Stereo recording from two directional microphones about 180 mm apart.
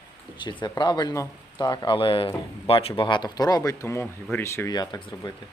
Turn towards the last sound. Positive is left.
turn(degrees=25)  # may be behind; listen again after turning